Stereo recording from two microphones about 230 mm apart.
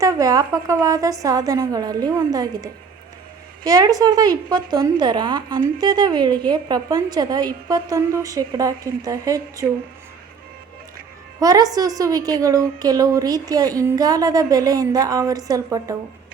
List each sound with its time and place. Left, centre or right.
0.0 s a woman's voice: centre
11.3 s a woman's voice: centre